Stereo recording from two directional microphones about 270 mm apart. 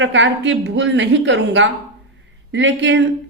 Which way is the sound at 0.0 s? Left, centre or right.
Right.